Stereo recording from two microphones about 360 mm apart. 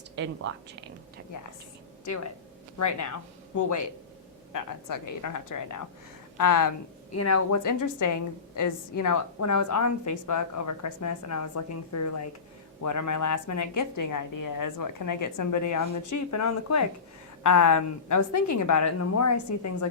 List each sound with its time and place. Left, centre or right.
0.2 s speech: right
2.0 s a woman's voice: left
7.1 s a woman's voice: left